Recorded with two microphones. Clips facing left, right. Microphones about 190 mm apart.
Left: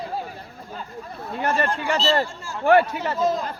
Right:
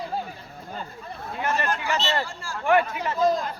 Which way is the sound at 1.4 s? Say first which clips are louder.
Left 3 dB; 30° left (ahead or behind).